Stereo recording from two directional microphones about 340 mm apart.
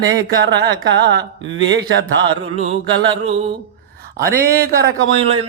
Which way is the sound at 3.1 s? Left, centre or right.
Centre.